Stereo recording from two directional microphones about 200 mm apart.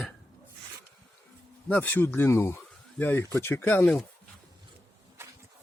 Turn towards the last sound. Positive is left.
turn(degrees=5)  # may be behind; listen again after turning